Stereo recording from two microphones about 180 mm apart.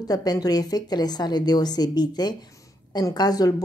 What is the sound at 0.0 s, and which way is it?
A woman's voice, 20° left (ahead or behind).